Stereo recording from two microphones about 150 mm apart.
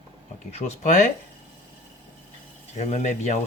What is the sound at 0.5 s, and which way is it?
Speech, 50° left (ahead or behind).